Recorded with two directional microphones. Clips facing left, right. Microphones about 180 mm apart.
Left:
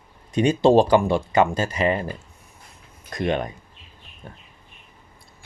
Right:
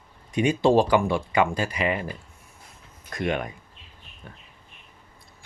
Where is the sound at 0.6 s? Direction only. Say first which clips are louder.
Left 4 dB; 25° left (ahead or behind).